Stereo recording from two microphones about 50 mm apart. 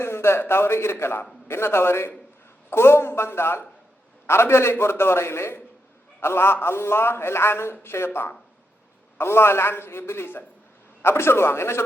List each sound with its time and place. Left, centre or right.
0.0 s a man's voice: left